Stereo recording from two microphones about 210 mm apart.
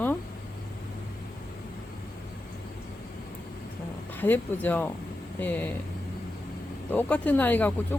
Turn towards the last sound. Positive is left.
turn(degrees=10)  # may be behind; listen again after turning